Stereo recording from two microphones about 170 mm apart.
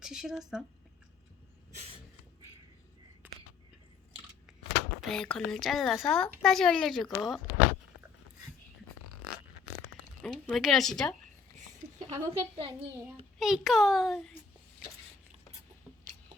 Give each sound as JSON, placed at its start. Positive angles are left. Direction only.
{"t": 0.0, "sound": "speech", "side_deg": -5}
{"t": 4.9, "sound": "speech", "side_deg": 5}
{"t": 10.2, "sound": "speech", "side_deg": 0}
{"t": 12.0, "sound": "a woman's voice", "side_deg": -35}
{"t": 13.4, "sound": "speech", "side_deg": 0}